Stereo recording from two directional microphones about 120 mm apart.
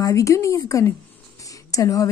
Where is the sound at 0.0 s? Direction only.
25° left (ahead or behind).